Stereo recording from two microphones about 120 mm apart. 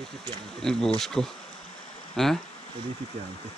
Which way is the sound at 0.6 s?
5° left (ahead or behind).